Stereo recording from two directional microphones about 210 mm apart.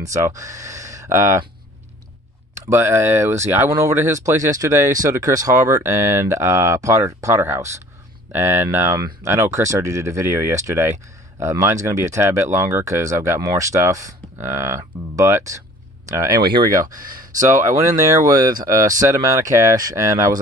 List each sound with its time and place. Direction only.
0.0 s speech: 15° right (ahead or behind)
2.7 s speech: 10° right (ahead or behind)
17.0 s speech: 40° right (ahead or behind)
17.5 s speech: 15° right (ahead or behind)